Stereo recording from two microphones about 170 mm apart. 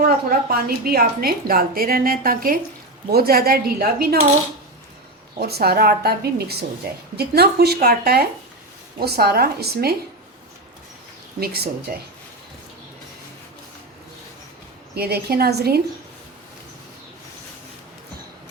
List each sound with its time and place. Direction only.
0.0 s a woman's voice: 65° right (ahead or behind)
5.4 s speech: 65° right (ahead or behind)
11.3 s a woman's voice: 65° right (ahead or behind)
14.9 s speech: 65° right (ahead or behind)